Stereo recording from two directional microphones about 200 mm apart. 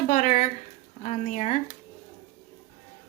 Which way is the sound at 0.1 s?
40° left (ahead or behind).